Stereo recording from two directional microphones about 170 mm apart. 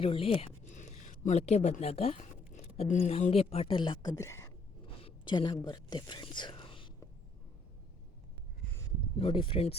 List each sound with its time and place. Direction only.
0.0 s a sound: 35° left (ahead or behind)
2.9 s speech: 40° left (ahead or behind); by 4.5 s 15° left (ahead or behind)
4.8 s whispering: 30° left (ahead or behind)
9.1 s speech: 30° left (ahead or behind)